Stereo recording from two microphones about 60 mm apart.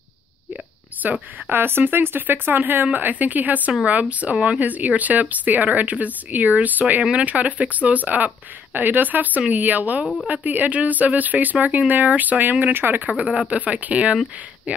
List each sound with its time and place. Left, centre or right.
1.0 s speech: right